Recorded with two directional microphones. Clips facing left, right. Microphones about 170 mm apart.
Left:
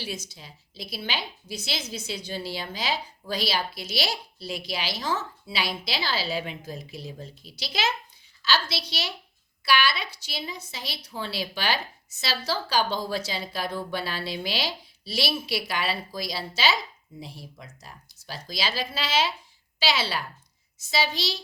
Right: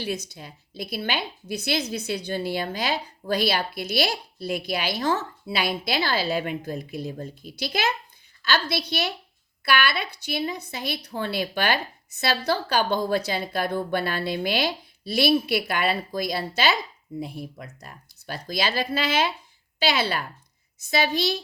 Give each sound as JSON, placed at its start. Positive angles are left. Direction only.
{"t": 0.0, "sound": "a woman's voice", "side_deg": -55}